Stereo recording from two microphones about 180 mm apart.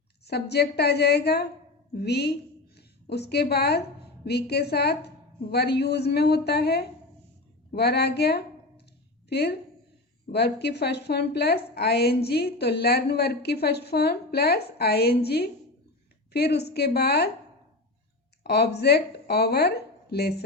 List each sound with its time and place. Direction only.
0.3 s a woman's voice: 65° left (ahead or behind)
18.4 s a woman's voice: 65° left (ahead or behind)